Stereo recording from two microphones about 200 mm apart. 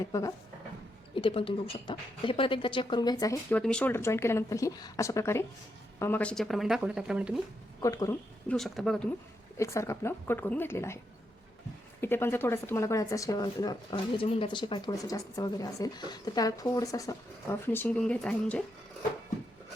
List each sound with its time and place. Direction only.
0.0 s a woman's voice: 15° left (ahead or behind)
3.6 s a woman's voice: 5° left (ahead or behind)
7.8 s a woman's voice: 15° left (ahead or behind)
8.4 s a woman's voice: centre (ahead or behind)